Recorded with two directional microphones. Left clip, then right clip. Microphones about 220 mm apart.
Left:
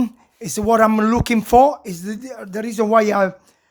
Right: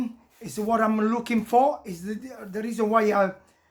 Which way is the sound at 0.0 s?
50° left (ahead or behind).